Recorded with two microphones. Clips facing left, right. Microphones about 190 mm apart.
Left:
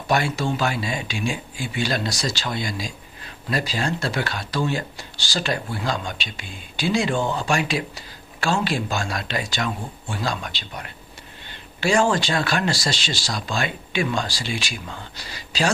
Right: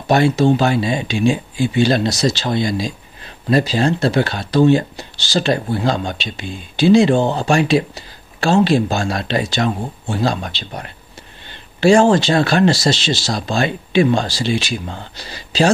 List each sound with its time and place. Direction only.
0.1 s speech: 25° right (ahead or behind)